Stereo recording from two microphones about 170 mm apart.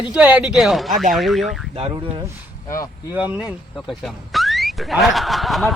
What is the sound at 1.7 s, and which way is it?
Speech, 30° right (ahead or behind).